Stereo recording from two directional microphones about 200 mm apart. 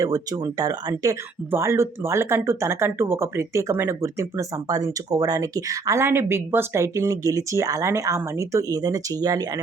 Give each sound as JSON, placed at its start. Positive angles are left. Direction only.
{"t": 0.0, "sound": "speech", "side_deg": -15}